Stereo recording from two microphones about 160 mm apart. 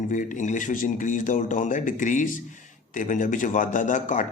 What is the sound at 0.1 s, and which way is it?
A man's voice, 55° left (ahead or behind).